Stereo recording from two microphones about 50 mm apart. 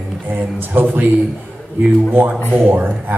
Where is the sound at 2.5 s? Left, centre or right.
Right.